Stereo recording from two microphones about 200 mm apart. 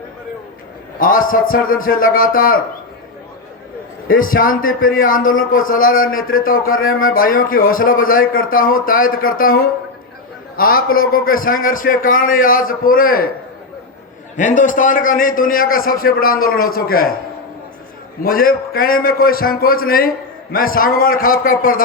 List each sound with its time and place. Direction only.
0.9 s a man's voice: 45° left (ahead or behind)
4.1 s a man's voice: 45° left (ahead or behind)
14.3 s a man's voice: 40° left (ahead or behind)
18.2 s a man's voice: 45° left (ahead or behind)